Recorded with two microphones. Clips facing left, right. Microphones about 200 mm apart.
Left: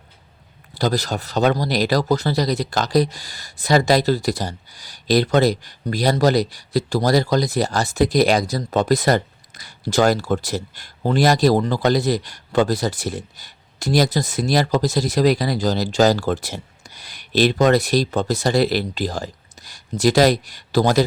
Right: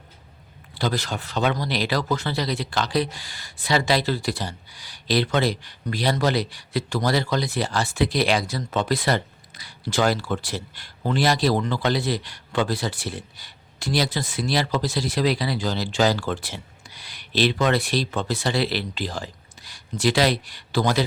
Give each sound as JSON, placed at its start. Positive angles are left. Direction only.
{"t": 0.7, "sound": "speech", "side_deg": 40}